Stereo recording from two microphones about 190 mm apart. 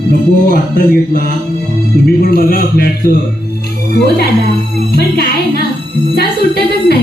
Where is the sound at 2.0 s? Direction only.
50° left (ahead or behind).